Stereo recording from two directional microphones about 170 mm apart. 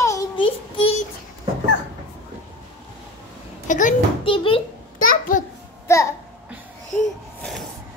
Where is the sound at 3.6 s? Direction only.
50° left (ahead or behind).